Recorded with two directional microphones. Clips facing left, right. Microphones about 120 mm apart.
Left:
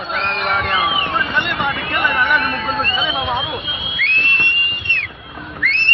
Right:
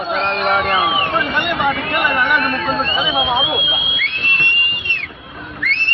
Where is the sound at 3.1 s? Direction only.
15° right (ahead or behind).